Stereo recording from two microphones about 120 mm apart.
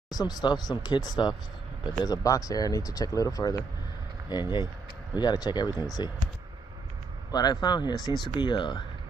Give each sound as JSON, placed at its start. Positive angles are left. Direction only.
{"t": 0.1, "sound": "speech", "side_deg": 35}
{"t": 7.2, "sound": "speech", "side_deg": 35}